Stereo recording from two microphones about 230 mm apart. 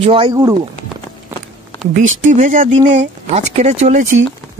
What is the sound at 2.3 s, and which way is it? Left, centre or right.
Speech, right.